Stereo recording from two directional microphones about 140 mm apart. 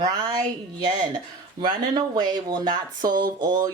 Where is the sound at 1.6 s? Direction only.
30° right (ahead or behind).